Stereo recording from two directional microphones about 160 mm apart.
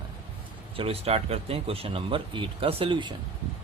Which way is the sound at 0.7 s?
35° right (ahead or behind).